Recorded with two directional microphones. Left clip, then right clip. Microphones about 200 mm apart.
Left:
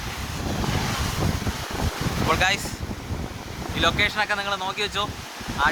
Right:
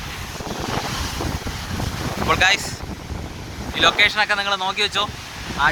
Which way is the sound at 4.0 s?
25° right (ahead or behind).